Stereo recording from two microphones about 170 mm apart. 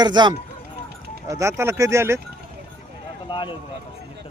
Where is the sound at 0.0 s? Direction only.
25° right (ahead or behind).